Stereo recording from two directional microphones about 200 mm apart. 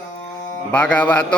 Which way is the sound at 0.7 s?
5° left (ahead or behind).